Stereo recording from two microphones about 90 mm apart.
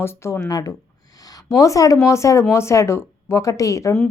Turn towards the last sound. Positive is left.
turn(degrees=35)  # may be behind; listen again after turning